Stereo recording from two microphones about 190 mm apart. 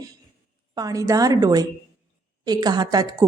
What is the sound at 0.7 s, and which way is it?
A woman's voice, 20° right (ahead or behind).